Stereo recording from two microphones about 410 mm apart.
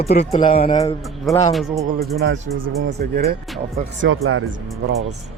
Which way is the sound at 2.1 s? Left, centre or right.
Right.